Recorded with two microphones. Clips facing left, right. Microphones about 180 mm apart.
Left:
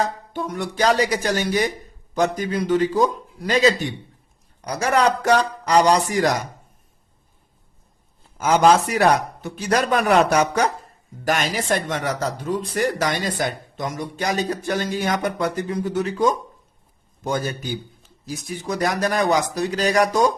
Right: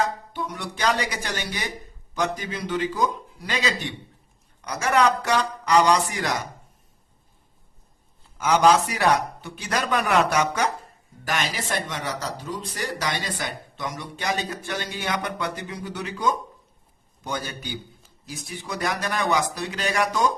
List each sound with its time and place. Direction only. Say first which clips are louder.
0.3 s speech: left 11 dB; 50° left (ahead or behind)
8.4 s speech: left 3 dB; 45° left (ahead or behind)